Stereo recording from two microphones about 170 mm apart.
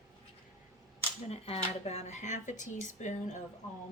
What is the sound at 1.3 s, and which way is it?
Speech, 35° left (ahead or behind).